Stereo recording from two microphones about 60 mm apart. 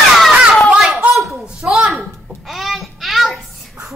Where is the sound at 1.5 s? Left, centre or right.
Centre.